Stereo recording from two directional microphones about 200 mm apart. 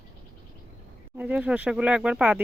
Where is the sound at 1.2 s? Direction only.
5° right (ahead or behind).